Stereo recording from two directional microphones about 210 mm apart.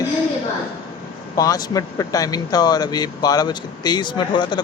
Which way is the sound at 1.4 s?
15° left (ahead or behind).